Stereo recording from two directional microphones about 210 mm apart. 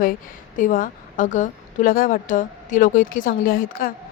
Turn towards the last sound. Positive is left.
turn(degrees=45)  # may be behind; listen again after turning